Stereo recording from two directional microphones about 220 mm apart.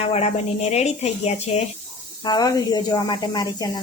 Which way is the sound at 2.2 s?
20° left (ahead or behind).